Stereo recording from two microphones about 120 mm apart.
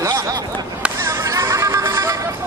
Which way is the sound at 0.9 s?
25° right (ahead or behind).